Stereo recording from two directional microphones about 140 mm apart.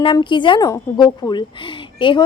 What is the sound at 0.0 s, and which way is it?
A woman's voice, 35° left (ahead or behind).